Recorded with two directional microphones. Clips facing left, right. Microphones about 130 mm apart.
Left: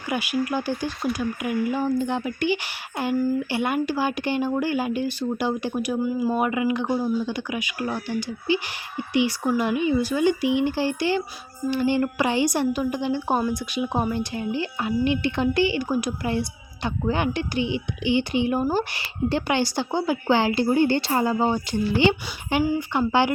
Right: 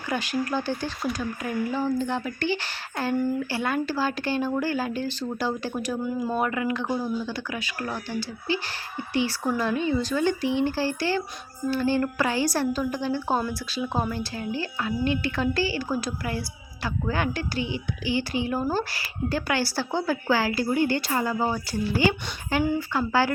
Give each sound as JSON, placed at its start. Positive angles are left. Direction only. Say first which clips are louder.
{"t": 0.1, "sound": "a woman's voice", "louder": "left 2 dB", "side_deg": 10}